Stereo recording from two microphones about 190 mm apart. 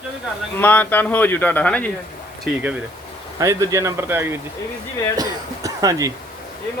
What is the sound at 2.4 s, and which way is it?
Speech, 5° right (ahead or behind).